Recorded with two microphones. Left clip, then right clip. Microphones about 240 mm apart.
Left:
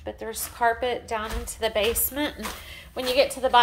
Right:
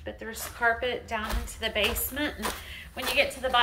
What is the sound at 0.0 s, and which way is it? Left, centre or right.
A woman's voice, centre.